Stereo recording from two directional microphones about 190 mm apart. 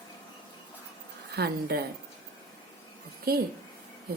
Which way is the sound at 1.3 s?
55° right (ahead or behind).